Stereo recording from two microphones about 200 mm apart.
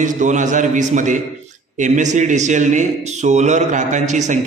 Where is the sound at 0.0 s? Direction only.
40° right (ahead or behind).